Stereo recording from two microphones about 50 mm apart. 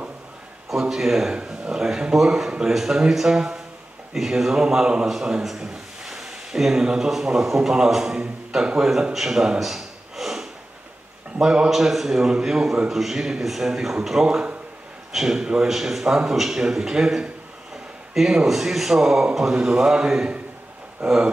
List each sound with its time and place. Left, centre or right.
0.7 s a man's voice: centre
6.0 s a sound: centre
7.1 s a man's voice: centre
9.1 s a sound: centre
11.4 s a man's voice: centre
11.7 s a man's voice: centre